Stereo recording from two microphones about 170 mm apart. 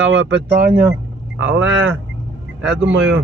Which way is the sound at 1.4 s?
10° right (ahead or behind).